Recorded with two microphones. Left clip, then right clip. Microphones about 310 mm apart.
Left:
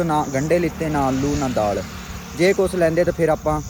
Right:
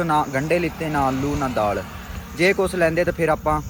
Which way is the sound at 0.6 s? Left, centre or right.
Right.